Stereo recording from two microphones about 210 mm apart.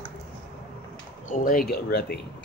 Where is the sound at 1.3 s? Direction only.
40° left (ahead or behind).